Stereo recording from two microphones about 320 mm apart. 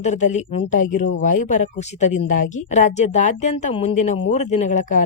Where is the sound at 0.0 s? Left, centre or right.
Left.